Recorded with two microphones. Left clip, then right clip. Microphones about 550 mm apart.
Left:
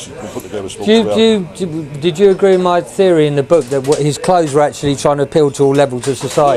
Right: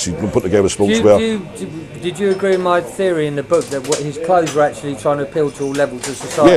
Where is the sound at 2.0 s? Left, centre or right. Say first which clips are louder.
Left 6 dB; left.